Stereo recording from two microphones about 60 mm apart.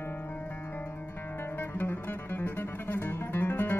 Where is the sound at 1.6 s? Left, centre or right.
Left.